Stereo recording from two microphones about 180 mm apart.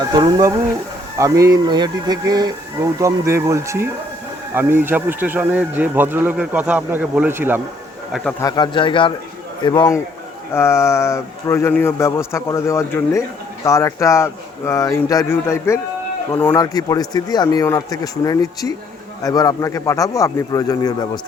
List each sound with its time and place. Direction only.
0.1 s a sound: 20° right (ahead or behind)
1.2 s speech: 20° right (ahead or behind)
8.4 s speech: 20° left (ahead or behind)